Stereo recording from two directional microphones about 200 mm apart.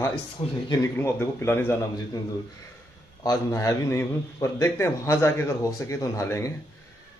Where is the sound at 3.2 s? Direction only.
15° left (ahead or behind).